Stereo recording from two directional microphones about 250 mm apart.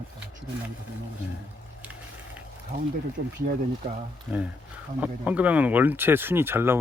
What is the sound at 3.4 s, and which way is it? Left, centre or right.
Speech, right.